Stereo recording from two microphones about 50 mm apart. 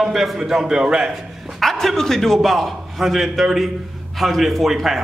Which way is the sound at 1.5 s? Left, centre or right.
Centre.